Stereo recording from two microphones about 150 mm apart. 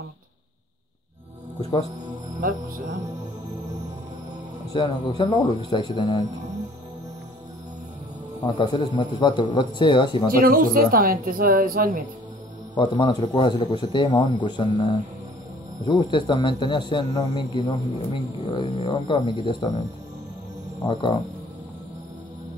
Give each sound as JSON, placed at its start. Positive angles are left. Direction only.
{"t": 1.6, "sound": "speech", "side_deg": 25}
{"t": 4.7, "sound": "a man's voice", "side_deg": 30}
{"t": 8.5, "sound": "a man's voice", "side_deg": 30}
{"t": 10.4, "sound": "a woman's voice", "side_deg": -70}
{"t": 12.7, "sound": "a man's voice", "side_deg": 30}
{"t": 20.8, "sound": "a man's voice", "side_deg": 35}